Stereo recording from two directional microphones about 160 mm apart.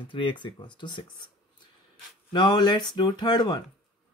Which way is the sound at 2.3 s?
30° left (ahead or behind).